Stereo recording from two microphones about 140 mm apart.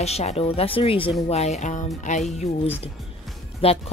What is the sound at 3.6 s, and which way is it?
Music, 45° left (ahead or behind).